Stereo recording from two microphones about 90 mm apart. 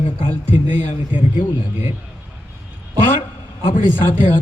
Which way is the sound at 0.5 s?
20° right (ahead or behind).